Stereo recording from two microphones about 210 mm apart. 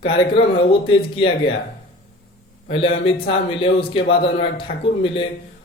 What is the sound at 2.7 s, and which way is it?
A man's voice, 25° left (ahead or behind).